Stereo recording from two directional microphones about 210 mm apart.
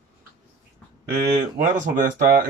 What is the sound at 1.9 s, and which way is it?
Speech, 40° right (ahead or behind).